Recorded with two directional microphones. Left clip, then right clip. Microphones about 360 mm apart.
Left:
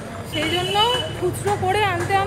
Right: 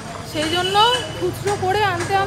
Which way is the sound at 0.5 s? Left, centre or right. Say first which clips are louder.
Right 4 dB; centre.